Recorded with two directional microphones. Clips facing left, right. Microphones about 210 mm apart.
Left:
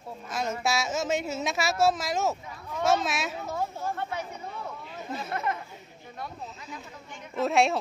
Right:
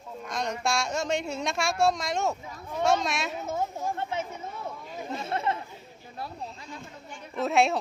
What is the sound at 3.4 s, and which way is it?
Speech, 20° right (ahead or behind).